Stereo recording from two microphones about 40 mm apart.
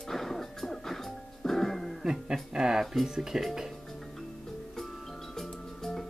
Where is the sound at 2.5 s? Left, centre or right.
Centre.